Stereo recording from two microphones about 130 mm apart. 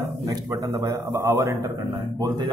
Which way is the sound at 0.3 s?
30° right (ahead or behind).